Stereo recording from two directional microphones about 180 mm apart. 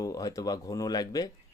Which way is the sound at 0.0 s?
20° left (ahead or behind).